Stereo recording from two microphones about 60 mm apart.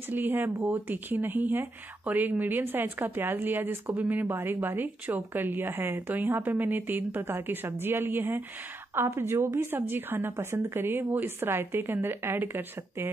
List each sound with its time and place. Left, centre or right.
0.1 s speech: right
9.6 s speech: right
10.3 s speech: right